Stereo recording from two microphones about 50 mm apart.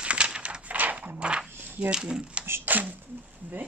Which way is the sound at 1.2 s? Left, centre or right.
Right.